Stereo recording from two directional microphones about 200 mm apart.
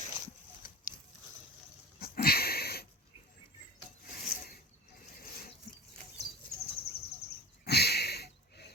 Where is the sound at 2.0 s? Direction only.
50° left (ahead or behind).